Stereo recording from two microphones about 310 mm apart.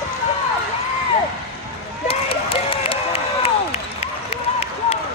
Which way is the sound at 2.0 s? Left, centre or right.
Centre.